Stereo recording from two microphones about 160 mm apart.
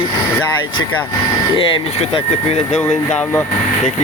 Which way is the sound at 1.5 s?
35° left (ahead or behind).